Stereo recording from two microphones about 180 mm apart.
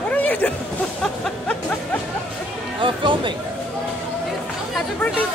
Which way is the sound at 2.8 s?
25° right (ahead or behind).